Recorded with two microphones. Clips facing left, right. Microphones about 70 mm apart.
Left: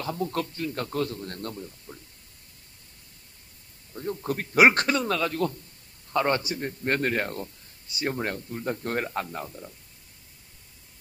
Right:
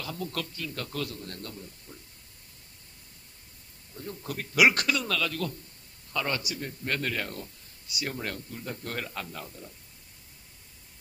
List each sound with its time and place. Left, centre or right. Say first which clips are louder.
0.0 s speech: left 6 dB; left
3.9 s speech: left 7 dB; left